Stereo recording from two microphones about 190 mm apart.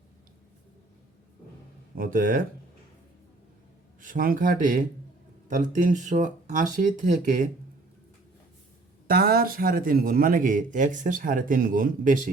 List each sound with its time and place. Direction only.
2.0 s a man's voice: 45° right (ahead or behind)
4.0 s a man's voice: 45° right (ahead or behind)
9.0 s a man's voice: 50° right (ahead or behind)